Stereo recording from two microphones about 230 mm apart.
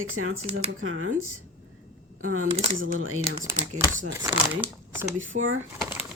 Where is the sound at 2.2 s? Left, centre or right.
Right.